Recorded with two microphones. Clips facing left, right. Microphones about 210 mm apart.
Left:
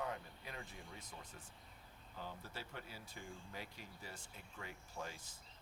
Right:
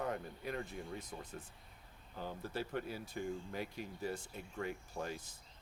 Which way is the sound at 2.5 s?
55° right (ahead or behind).